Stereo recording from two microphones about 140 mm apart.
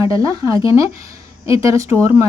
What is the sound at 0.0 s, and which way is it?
Speech, 25° right (ahead or behind).